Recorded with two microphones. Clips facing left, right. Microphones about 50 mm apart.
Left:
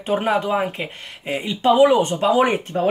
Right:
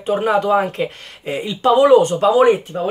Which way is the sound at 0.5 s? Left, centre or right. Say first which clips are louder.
Right 5 dB; centre.